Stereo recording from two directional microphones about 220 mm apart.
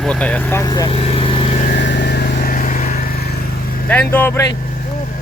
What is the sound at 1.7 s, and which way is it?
Vehicle, 50° left (ahead or behind).